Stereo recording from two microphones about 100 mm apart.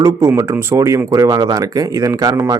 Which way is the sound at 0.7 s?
30° right (ahead or behind).